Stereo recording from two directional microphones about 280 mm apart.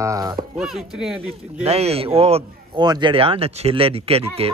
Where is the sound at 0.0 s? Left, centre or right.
Centre.